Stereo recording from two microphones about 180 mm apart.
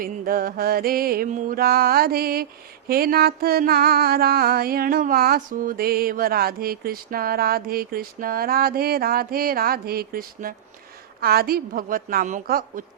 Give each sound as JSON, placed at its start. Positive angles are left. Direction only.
{"t": 0.0, "sound": "mantra", "side_deg": -55}